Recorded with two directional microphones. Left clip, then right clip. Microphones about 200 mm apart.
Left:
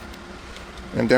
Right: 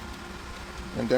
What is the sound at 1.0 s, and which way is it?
Speech, 45° left (ahead or behind).